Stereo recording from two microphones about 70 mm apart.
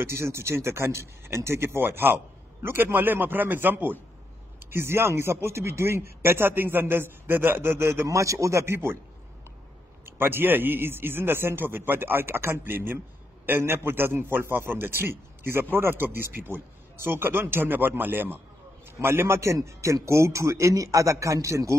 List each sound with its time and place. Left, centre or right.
0.0 s a man's voice: right
10.0 s a man's voice: right